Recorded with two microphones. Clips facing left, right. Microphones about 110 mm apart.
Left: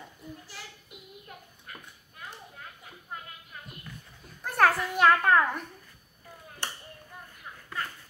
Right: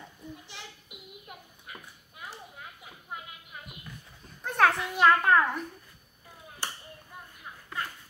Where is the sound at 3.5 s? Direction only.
15° right (ahead or behind).